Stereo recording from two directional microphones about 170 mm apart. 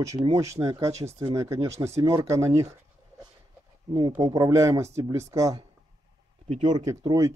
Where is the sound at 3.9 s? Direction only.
25° right (ahead or behind).